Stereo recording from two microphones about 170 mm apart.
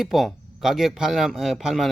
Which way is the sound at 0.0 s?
Centre (ahead or behind).